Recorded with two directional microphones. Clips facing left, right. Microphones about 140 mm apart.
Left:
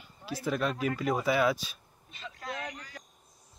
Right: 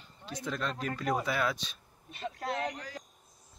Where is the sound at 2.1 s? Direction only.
55° right (ahead or behind).